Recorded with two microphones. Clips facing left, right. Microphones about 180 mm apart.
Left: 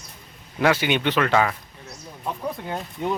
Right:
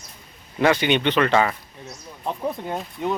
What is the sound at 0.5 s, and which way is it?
Speech, 5° left (ahead or behind).